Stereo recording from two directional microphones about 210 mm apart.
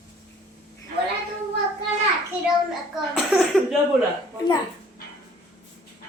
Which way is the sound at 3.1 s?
Centre (ahead or behind).